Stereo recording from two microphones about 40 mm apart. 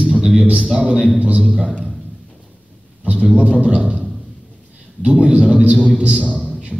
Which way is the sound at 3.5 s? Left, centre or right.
Right.